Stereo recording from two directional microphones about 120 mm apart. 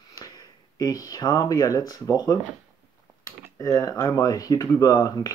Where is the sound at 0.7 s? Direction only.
30° left (ahead or behind).